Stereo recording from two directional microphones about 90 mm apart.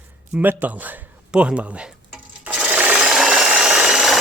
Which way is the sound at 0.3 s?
15° right (ahead or behind).